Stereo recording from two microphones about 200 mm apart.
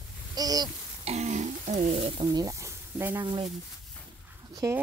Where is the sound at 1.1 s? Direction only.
35° right (ahead or behind).